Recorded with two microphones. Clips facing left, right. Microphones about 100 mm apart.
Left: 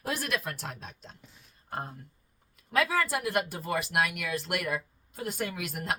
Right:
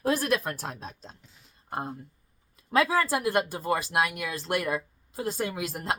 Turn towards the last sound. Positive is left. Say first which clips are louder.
# right 3 dB
turn(degrees=-25)  # may be behind; listen again after turning